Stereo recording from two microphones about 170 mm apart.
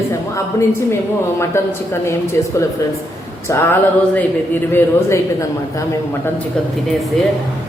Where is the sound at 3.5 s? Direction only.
15° left (ahead or behind).